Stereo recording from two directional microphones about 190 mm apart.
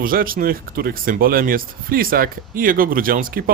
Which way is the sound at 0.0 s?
50° right (ahead or behind).